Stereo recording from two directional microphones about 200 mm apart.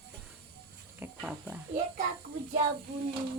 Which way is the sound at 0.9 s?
10° right (ahead or behind).